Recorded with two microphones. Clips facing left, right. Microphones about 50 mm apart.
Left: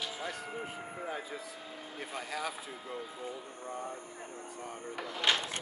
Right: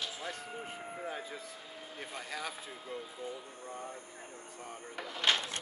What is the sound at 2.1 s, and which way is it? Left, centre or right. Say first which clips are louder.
Speech: left 3 dB; left.